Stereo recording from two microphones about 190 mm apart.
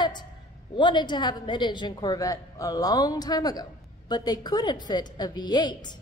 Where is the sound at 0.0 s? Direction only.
25° left (ahead or behind).